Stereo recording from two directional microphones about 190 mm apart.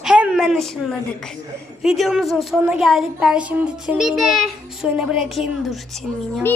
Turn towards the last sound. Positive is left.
turn(degrees=0)  # may be behind; listen again after turning